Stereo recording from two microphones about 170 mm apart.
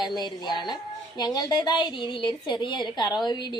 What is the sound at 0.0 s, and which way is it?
Speech, 25° left (ahead or behind).